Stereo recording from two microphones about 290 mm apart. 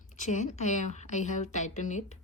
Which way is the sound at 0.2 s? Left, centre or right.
Left.